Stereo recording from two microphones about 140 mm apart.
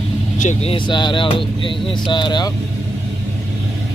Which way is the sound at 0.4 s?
55° left (ahead or behind).